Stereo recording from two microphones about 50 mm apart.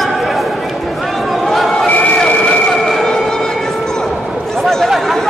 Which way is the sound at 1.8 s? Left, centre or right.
Left.